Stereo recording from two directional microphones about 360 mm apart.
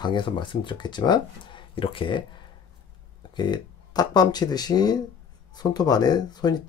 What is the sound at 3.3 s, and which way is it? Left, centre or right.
Speech, centre.